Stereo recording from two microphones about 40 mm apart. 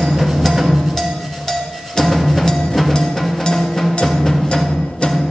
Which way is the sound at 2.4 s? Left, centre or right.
Centre.